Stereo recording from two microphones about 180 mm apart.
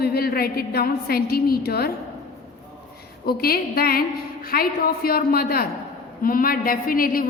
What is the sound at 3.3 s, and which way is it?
A woman's voice, 55° left (ahead or behind).